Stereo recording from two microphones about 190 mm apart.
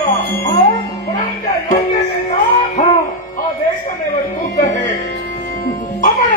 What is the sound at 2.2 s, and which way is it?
Music, 40° left (ahead or behind).